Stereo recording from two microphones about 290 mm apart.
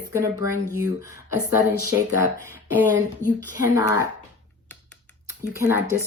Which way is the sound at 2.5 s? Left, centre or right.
Left.